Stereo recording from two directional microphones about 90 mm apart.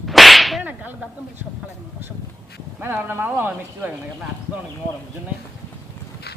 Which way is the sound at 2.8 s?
25° right (ahead or behind).